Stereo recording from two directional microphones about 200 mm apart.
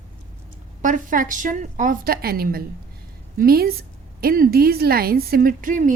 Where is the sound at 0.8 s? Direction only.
40° right (ahead or behind).